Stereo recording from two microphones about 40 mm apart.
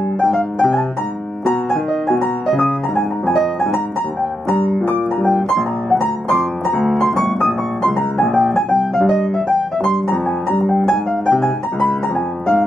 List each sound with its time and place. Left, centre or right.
0.2 s music: centre
2.5 s piano: centre
3.3 s music: centre
5.5 s piano: centre
10.0 s piano: centre
11.2 s music: centre